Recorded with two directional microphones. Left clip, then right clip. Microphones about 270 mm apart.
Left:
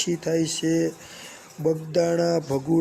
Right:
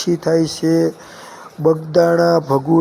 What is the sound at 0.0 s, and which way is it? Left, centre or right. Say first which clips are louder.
Speech: right 8 dB; centre.